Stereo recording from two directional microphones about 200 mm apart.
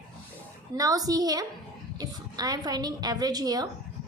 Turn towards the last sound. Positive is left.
turn(degrees=-20)  # may be behind; listen again after turning